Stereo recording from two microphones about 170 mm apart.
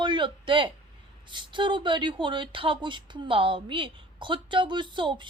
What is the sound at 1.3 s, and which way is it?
A woman's voice, 30° right (ahead or behind).